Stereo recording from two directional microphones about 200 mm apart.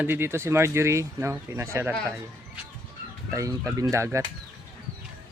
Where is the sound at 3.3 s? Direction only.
15° right (ahead or behind).